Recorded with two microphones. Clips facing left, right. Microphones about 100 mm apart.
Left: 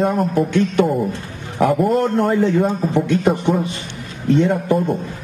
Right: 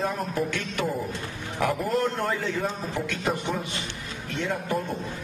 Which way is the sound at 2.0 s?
40° left (ahead or behind).